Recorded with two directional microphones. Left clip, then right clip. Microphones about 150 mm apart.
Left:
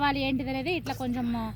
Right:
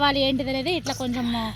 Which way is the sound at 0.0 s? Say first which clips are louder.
Right 6 dB; 55° right (ahead or behind).